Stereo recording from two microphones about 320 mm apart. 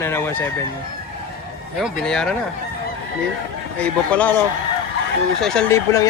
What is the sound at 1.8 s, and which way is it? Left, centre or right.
Speech, centre.